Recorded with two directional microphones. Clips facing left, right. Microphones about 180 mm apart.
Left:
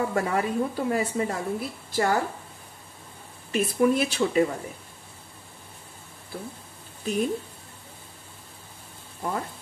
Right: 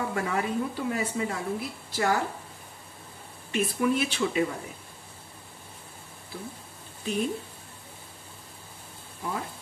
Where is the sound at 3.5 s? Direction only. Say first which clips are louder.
Left 4 dB; 40° left (ahead or behind).